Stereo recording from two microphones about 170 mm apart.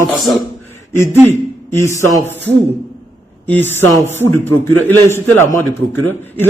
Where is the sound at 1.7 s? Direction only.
15° left (ahead or behind).